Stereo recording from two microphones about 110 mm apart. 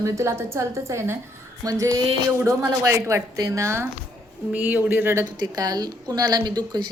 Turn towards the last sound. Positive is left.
turn(degrees=-40)  # may be behind; listen again after turning